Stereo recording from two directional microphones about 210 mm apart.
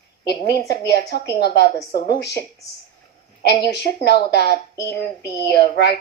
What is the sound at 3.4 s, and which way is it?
Speech, 50° left (ahead or behind).